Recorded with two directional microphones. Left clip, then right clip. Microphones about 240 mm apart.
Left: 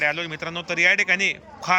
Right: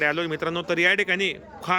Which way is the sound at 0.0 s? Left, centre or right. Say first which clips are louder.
Even; centre.